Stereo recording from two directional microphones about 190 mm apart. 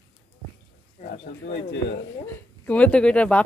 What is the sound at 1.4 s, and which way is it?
Speech, 75° left (ahead or behind).